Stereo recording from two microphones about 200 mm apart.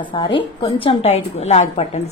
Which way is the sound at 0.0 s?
25° left (ahead or behind).